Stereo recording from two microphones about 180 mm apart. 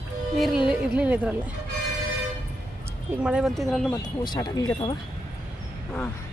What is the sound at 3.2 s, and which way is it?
Speech, 5° right (ahead or behind).